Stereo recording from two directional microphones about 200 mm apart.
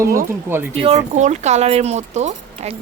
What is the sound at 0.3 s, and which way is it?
Speech, 10° right (ahead or behind).